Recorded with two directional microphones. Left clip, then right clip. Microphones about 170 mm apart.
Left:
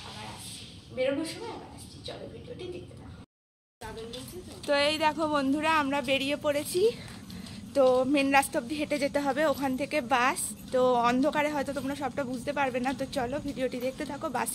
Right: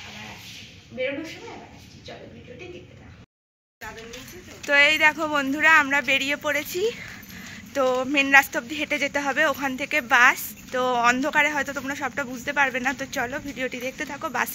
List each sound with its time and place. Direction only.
4.6 s speech: centre (ahead or behind)